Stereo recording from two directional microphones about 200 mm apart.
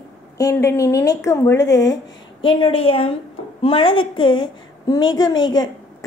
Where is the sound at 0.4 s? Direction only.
15° left (ahead or behind).